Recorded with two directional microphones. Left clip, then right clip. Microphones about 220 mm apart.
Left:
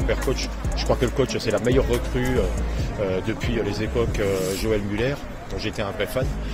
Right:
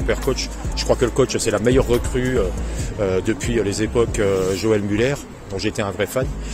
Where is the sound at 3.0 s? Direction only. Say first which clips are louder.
Right 5 dB; 55° right (ahead or behind).